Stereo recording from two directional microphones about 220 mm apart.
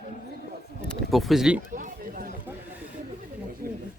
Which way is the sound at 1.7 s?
40° right (ahead or behind).